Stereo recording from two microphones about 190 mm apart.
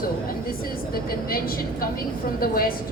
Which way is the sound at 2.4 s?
50° left (ahead or behind).